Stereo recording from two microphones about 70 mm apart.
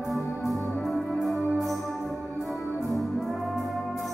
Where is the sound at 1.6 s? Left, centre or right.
Centre.